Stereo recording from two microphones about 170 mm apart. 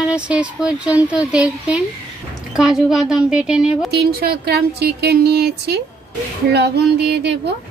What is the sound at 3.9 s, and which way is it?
Speech, 65° right (ahead or behind).